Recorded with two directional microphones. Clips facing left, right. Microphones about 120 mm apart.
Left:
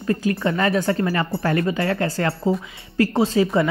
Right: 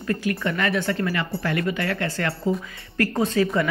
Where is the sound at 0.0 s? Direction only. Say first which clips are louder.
Left 4 dB; 25° left (ahead or behind).